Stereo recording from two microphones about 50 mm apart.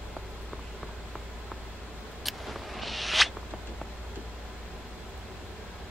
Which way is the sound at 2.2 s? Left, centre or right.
Centre.